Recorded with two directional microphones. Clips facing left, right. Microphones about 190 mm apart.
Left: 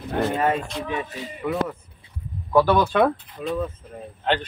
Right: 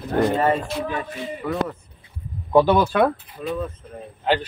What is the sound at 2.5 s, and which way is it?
Speech, 20° right (ahead or behind).